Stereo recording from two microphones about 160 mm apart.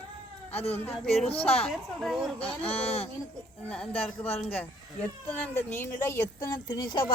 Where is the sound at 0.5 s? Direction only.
40° left (ahead or behind).